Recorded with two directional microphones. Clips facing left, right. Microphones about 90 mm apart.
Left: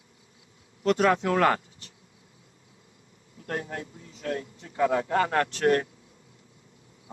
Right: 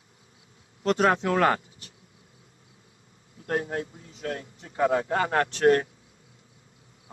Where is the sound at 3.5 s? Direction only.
35° right (ahead or behind).